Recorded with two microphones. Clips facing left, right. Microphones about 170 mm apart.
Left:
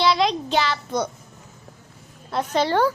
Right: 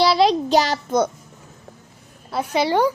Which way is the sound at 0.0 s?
35° right (ahead or behind).